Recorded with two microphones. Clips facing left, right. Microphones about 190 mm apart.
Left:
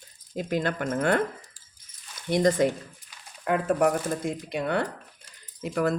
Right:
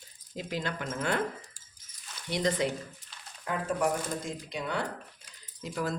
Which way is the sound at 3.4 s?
60° left (ahead or behind).